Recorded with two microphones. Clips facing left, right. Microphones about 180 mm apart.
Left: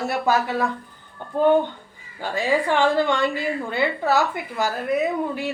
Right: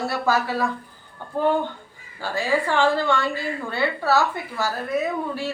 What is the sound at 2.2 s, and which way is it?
A woman's voice, 20° left (ahead or behind).